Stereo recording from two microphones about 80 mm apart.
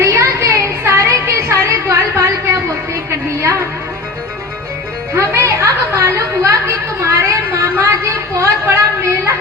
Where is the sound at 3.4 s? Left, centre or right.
Right.